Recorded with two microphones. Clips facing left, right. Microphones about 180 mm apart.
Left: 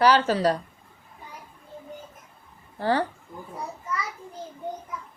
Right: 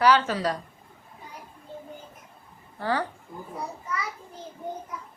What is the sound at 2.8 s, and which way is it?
Speech, 30° left (ahead or behind).